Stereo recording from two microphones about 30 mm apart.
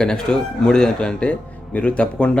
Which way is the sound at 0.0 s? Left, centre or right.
Left.